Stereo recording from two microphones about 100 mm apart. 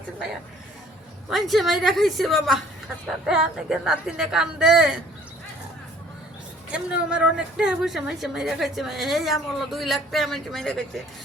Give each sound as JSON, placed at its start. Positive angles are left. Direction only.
{"t": 1.3, "sound": "speech", "side_deg": 0}
{"t": 6.7, "sound": "speech", "side_deg": -10}